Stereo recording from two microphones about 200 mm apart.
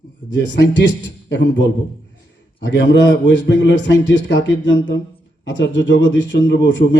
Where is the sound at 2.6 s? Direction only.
65° left (ahead or behind).